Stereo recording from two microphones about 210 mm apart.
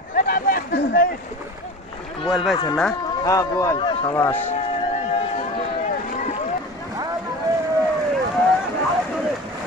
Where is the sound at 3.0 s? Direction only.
15° left (ahead or behind).